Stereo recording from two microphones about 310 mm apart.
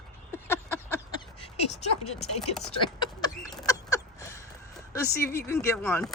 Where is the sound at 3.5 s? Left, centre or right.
Centre.